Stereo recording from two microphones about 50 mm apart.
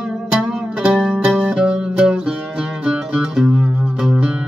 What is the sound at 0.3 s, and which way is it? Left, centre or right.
Music, centre.